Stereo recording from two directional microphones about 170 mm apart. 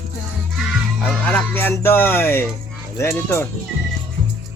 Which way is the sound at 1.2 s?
10° left (ahead or behind).